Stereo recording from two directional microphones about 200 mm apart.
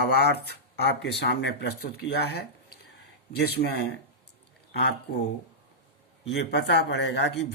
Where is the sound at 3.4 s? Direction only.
55° left (ahead or behind).